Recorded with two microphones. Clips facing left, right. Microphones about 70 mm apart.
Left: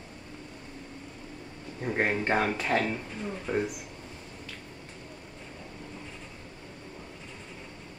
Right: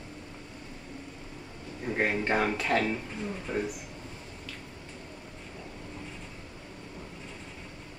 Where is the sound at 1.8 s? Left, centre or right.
Centre.